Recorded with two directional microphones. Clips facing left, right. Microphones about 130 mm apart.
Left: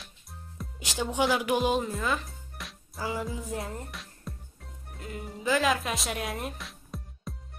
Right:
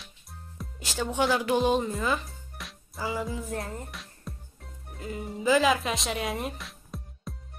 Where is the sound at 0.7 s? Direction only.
15° left (ahead or behind).